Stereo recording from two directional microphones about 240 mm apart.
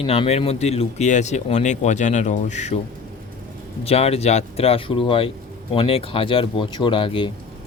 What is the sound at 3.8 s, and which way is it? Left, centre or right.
Speech, left.